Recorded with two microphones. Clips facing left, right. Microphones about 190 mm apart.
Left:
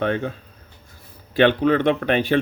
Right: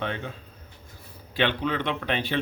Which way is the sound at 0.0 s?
50° left (ahead or behind).